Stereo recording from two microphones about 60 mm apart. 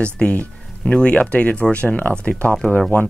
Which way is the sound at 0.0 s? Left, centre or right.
Centre.